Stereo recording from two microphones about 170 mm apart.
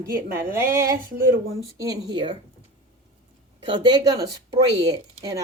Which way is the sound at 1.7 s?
20° right (ahead or behind).